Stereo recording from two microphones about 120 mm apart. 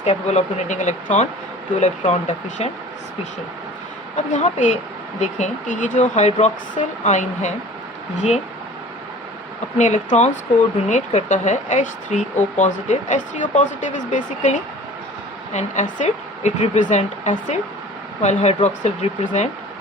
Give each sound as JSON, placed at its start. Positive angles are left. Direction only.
{"t": 0.0, "sound": "speech", "side_deg": 70}
{"t": 4.3, "sound": "speech", "side_deg": 85}
{"t": 9.7, "sound": "speech", "side_deg": 90}